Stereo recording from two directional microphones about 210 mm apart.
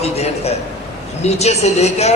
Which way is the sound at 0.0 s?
30° left (ahead or behind).